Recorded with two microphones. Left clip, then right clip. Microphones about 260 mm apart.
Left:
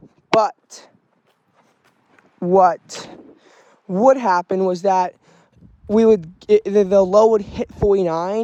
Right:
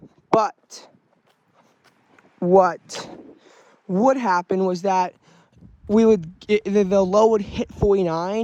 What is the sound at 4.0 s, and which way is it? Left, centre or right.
Speech, left.